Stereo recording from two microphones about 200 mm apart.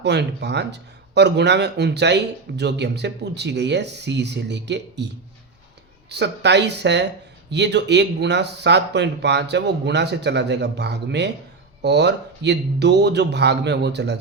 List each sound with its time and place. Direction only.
0.0 s speech: 60° right (ahead or behind)
6.1 s speech: 60° right (ahead or behind)